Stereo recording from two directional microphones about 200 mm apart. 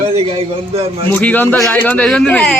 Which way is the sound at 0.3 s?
30° right (ahead or behind).